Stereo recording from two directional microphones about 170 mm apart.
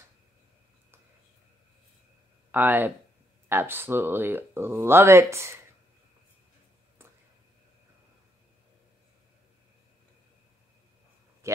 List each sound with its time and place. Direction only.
2.5 s speech: 10° right (ahead or behind)
11.4 s speech: 15° right (ahead or behind)